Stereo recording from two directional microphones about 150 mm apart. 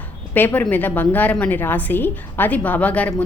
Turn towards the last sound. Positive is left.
turn(degrees=10)  # may be behind; listen again after turning